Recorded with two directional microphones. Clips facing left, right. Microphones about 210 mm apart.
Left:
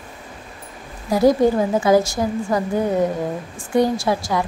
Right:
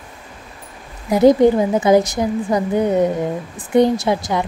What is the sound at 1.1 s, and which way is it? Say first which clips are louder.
Speech: right 4 dB; 20° right (ahead or behind).